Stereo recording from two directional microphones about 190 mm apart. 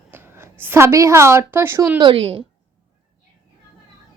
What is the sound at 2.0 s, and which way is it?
Speech, 25° right (ahead or behind).